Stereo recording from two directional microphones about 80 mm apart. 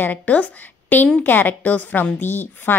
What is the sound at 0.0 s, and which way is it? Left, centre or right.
A woman's voice, left.